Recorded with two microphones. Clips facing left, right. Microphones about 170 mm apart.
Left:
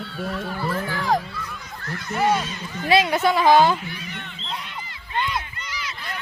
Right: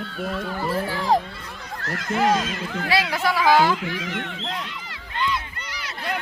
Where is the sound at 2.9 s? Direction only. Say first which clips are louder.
Left 5 dB; 20° left (ahead or behind).